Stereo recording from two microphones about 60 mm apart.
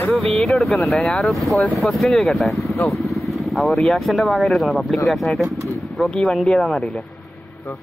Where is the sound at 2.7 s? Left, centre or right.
Left.